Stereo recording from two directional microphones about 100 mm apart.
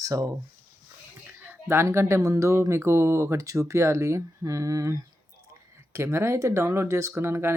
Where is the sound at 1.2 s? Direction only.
15° right (ahead or behind).